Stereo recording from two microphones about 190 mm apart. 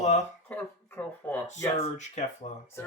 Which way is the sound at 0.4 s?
10° left (ahead or behind).